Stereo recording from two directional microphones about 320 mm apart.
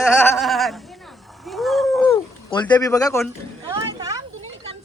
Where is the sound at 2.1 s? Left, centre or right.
Centre.